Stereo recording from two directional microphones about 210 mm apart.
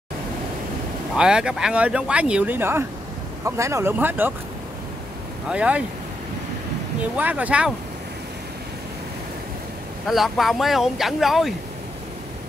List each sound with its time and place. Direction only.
1.1 s speech: 5° right (ahead or behind)
5.5 s speech: 5° right (ahead or behind)
7.2 s speech: 5° right (ahead or behind)
10.0 s speech: centre (ahead or behind)